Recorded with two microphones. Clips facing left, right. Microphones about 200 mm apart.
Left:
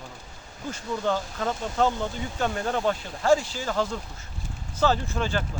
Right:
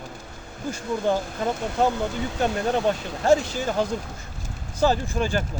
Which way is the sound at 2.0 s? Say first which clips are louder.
Right 4 dB; 70° right (ahead or behind).